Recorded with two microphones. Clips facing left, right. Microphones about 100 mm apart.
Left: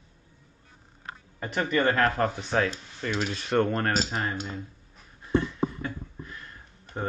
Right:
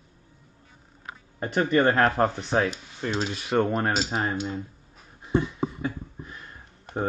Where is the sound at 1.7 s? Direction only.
30° right (ahead or behind).